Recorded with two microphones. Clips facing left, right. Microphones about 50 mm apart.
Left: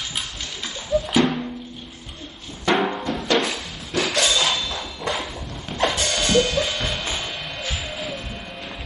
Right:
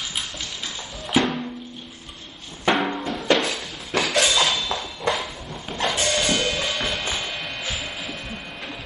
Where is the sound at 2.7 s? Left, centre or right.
Centre.